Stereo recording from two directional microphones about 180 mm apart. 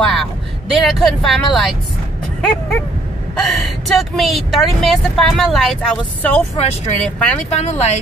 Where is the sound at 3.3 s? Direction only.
Centre (ahead or behind).